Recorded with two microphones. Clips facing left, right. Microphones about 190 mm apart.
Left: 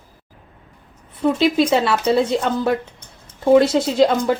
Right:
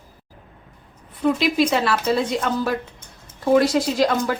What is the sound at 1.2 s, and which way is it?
Speech, 25° left (ahead or behind).